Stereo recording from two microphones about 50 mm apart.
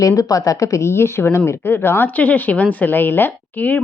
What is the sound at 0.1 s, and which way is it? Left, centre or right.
A woman's voice, left.